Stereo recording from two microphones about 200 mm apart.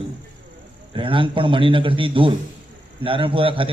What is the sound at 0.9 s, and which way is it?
A man's voice, 25° right (ahead or behind).